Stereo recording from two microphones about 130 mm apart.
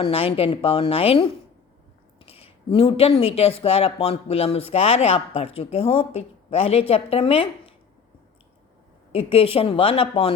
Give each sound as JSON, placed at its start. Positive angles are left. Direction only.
{"t": 0.0, "sound": "speech", "side_deg": 45}
{"t": 9.1, "sound": "speech", "side_deg": 45}